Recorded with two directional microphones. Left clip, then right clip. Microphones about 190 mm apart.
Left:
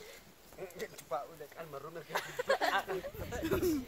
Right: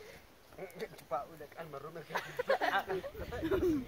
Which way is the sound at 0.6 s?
50° left (ahead or behind).